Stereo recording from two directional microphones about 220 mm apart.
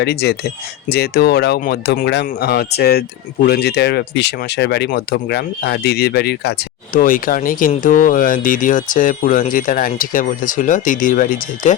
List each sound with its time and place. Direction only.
0.0 s speech: 50° left (ahead or behind)